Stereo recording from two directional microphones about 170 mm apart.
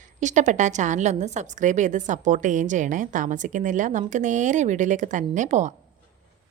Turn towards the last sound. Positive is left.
turn(degrees=-45)  # may be behind; listen again after turning